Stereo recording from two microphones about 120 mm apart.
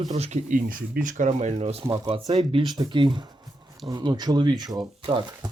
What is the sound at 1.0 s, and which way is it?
Speech, 90° right.